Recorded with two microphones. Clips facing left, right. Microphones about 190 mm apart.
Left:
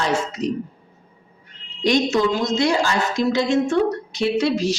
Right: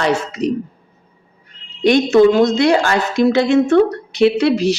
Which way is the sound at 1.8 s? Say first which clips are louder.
Right 7 dB; 60° right (ahead or behind).